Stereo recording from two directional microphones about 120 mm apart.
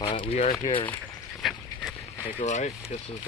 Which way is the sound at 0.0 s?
45° left (ahead or behind).